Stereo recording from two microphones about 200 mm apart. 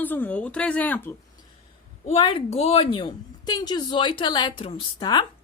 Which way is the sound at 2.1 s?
30° left (ahead or behind).